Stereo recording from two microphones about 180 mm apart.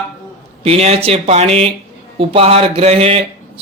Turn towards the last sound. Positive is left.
turn(degrees=-35)  # may be behind; listen again after turning